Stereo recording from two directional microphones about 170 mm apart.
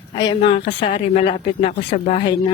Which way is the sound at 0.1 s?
30° left (ahead or behind).